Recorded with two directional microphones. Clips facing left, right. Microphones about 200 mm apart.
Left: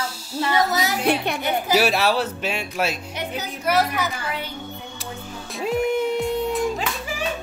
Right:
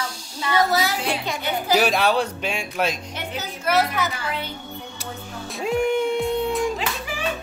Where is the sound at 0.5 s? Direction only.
20° left (ahead or behind).